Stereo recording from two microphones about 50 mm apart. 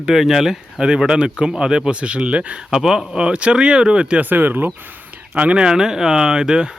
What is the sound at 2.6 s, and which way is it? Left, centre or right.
Speech, centre.